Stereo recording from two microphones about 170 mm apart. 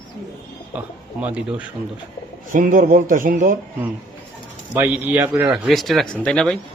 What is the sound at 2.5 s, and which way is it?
A man's voice, 55° right (ahead or behind).